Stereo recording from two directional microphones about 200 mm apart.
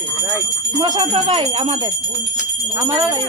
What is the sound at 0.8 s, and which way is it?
Speech, 20° right (ahead or behind).